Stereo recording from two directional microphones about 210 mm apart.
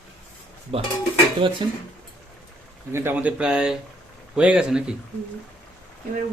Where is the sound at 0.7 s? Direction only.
30° right (ahead or behind).